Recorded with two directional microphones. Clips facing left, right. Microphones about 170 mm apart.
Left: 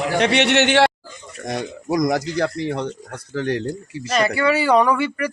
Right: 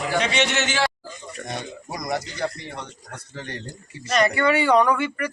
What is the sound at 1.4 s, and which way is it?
Speech, 90° left.